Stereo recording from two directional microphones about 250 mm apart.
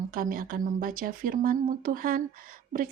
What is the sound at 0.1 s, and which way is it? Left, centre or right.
A woman's voice, right.